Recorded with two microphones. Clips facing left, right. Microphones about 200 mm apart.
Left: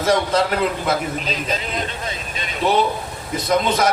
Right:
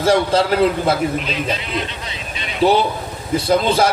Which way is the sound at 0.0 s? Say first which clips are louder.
Right 3 dB; 30° right (ahead or behind).